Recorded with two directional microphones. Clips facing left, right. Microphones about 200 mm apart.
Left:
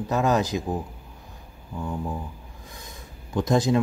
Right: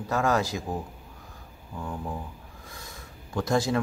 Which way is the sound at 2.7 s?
20° left (ahead or behind).